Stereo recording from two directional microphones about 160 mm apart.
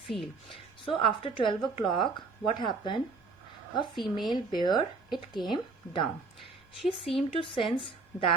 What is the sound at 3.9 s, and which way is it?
Speech, centre (ahead or behind).